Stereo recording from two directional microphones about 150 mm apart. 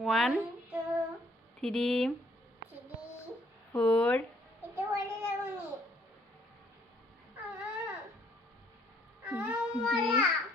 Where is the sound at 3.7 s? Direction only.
10° left (ahead or behind).